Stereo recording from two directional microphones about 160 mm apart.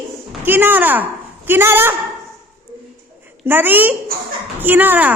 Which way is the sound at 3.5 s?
10° right (ahead or behind).